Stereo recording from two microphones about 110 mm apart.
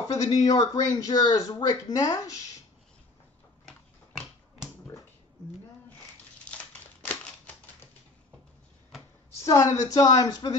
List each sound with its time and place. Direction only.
0.1 s speech: 35° left (ahead or behind)
6.5 s a sound: 15° left (ahead or behind)
9.5 s speech: 30° left (ahead or behind)